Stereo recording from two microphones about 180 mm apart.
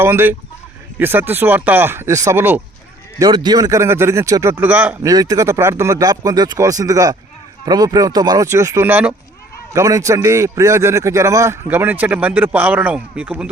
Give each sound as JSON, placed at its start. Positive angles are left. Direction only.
{"t": 0.0, "sound": "a man's voice", "side_deg": -10}
{"t": 3.2, "sound": "a man's voice", "side_deg": -20}
{"t": 5.0, "sound": "a man's voice", "side_deg": -20}